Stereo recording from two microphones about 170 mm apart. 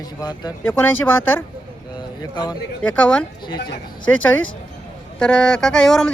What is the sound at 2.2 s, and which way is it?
Speech, 25° left (ahead or behind).